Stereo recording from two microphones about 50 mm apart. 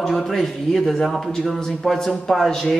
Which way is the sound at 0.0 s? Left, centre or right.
Centre.